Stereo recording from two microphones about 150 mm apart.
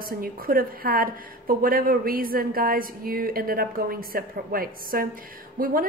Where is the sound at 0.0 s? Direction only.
75° right (ahead or behind).